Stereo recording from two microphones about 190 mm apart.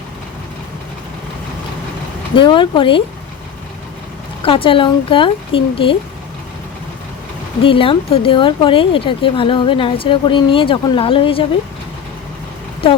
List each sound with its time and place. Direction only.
2.3 s speech: 25° left (ahead or behind)
4.4 s speech: 30° left (ahead or behind)
7.6 s speech: 30° left (ahead or behind)